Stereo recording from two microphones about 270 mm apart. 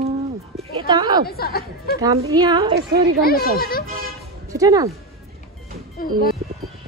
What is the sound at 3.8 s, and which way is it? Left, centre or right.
Toot, right.